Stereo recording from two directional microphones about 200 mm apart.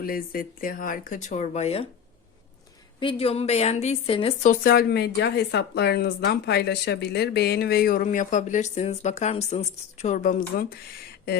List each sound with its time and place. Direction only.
0.0 s speech: 45° left (ahead or behind); by 1.9 s 30° left (ahead or behind)
3.0 s a woman's voice: 25° left (ahead or behind)
4.4 s speech: 50° left (ahead or behind)